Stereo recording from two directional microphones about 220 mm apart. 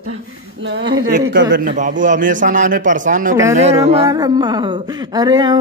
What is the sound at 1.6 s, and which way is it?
A man's voice, 35° right (ahead or behind).